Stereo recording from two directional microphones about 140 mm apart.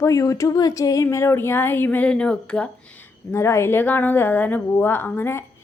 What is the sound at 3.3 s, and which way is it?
Speech, 20° left (ahead or behind).